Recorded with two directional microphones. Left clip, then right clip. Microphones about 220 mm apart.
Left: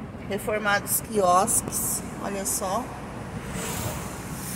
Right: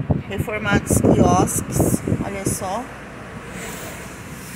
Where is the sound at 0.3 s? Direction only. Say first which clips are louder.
Right 1 dB; centre (ahead or behind).